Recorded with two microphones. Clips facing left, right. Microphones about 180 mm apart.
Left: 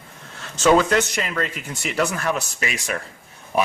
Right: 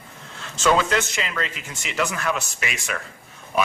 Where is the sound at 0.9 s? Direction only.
40° left (ahead or behind).